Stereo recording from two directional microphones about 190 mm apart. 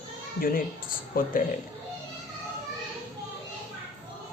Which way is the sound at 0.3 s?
50° left (ahead or behind).